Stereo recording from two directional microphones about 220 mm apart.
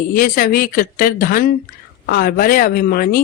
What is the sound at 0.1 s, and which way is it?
A man's voice, 40° left (ahead or behind).